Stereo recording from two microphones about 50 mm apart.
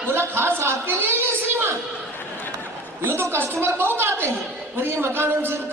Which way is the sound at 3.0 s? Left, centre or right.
Right.